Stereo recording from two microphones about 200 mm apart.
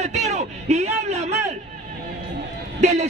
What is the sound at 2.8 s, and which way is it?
Music, 35° right (ahead or behind).